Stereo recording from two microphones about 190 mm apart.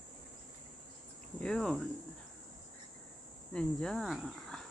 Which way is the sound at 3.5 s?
5° left (ahead or behind).